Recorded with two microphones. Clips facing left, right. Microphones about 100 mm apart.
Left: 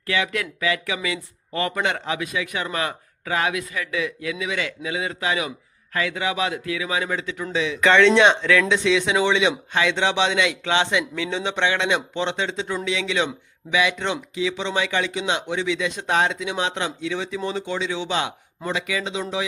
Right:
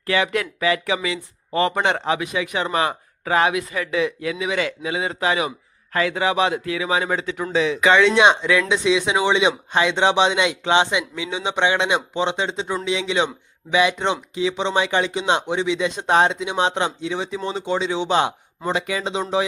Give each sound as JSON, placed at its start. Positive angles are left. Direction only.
{"t": 0.0, "sound": "a man's voice", "side_deg": -35}
{"t": 7.8, "sound": "speech", "side_deg": -10}